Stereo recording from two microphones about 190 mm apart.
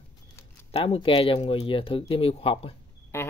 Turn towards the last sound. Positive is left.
turn(degrees=15)  # may be behind; listen again after turning